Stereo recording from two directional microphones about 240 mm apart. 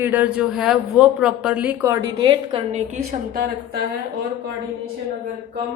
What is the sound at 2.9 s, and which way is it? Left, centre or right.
Speech, right.